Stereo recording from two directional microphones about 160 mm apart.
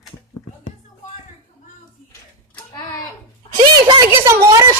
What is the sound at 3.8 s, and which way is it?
Speech, 20° right (ahead or behind).